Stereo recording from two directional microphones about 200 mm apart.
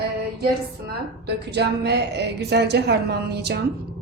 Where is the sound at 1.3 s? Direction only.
55° right (ahead or behind).